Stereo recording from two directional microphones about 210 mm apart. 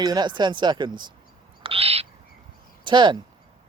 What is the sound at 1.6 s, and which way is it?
Owl, 25° right (ahead or behind).